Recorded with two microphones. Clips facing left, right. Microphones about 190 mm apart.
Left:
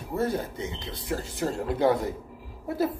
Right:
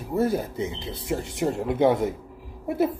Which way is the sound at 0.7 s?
25° right (ahead or behind).